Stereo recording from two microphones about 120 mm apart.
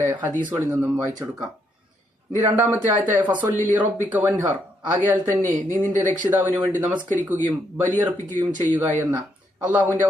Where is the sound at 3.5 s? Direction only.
90° right.